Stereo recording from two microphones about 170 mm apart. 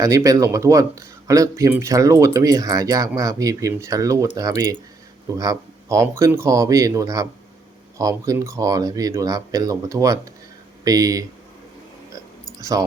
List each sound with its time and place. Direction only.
0.0 s speech: 20° right (ahead or behind)
12.7 s speech: 20° right (ahead or behind)